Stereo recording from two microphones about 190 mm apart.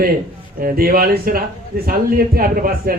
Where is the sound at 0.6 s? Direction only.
50° right (ahead or behind).